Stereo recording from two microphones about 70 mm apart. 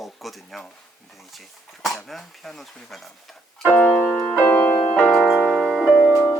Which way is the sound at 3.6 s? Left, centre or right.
Left.